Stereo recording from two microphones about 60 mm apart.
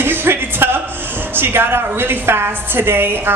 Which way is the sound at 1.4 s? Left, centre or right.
Right.